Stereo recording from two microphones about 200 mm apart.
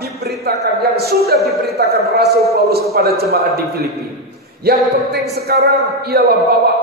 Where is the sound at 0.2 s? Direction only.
55° right (ahead or behind).